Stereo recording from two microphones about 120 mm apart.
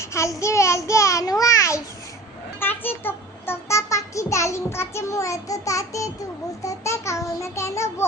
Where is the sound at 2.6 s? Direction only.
15° left (ahead or behind).